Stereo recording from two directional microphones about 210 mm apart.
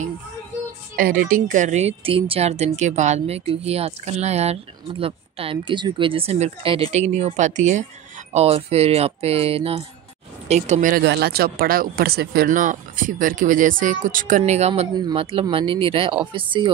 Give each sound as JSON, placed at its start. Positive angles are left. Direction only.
{"t": 0.9, "sound": "a woman's voice", "side_deg": -40}